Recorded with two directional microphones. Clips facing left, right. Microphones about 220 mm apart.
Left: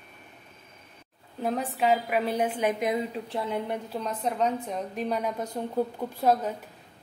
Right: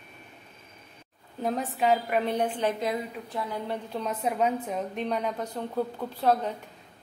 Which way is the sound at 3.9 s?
5° right (ahead or behind).